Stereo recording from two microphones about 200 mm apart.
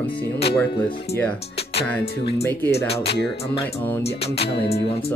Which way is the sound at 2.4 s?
15° left (ahead or behind).